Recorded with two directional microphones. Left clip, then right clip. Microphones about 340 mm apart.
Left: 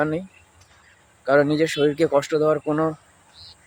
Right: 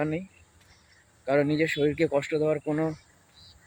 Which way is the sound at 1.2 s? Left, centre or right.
Right.